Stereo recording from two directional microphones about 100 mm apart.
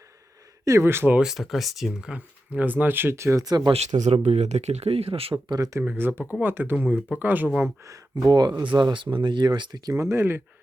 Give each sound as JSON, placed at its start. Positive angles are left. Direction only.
{"t": 0.6, "sound": "speech", "side_deg": -30}
{"t": 1.2, "sound": "speech", "side_deg": -5}
{"t": 3.7, "sound": "speech", "side_deg": -90}
{"t": 5.5, "sound": "speech", "side_deg": -35}
{"t": 5.8, "sound": "speech", "side_deg": -20}
{"t": 7.9, "sound": "speech", "side_deg": -35}
{"t": 9.9, "sound": "speech", "side_deg": -30}